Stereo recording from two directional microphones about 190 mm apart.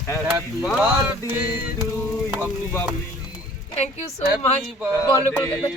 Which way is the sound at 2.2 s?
10° right (ahead or behind).